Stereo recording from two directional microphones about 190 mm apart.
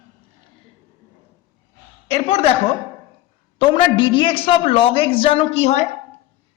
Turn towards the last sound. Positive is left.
turn(degrees=35)  # may be behind; listen again after turning